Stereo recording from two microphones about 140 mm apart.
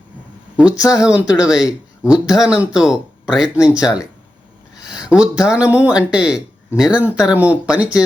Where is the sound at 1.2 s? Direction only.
25° left (ahead or behind).